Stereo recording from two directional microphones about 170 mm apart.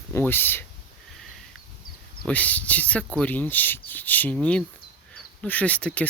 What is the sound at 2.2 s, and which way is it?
Speech, 10° left (ahead or behind).